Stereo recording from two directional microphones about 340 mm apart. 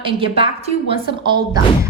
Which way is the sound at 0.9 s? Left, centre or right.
Centre.